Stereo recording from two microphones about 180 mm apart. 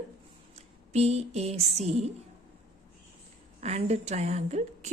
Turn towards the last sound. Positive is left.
turn(degrees=-40)  # may be behind; listen again after turning